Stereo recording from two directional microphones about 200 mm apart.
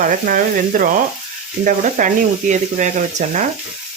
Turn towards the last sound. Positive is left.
turn(degrees=-40)  # may be behind; listen again after turning